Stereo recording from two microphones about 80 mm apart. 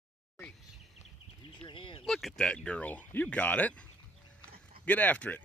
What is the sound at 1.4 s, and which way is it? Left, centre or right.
Speech, left.